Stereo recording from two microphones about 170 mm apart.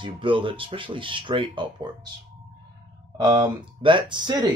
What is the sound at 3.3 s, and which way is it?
Speech, 25° right (ahead or behind).